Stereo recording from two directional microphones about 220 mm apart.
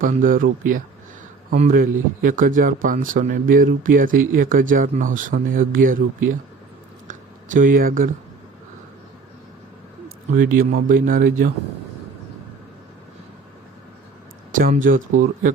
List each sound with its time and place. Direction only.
0.0 s speech: 40° right (ahead or behind)
1.5 s speech: 35° right (ahead or behind)
7.1 s speech: 35° right (ahead or behind)
10.3 s speech: 40° right (ahead or behind)
14.5 s speech: 35° right (ahead or behind)
14.9 s speech: 65° right (ahead or behind)